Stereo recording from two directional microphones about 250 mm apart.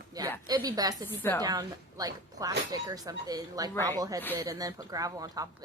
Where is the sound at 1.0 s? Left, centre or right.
Centre.